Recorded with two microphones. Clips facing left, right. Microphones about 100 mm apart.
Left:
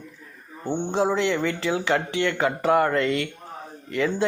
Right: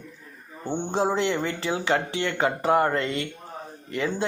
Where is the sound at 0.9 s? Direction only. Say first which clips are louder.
Left 1 dB; 35° right (ahead or behind).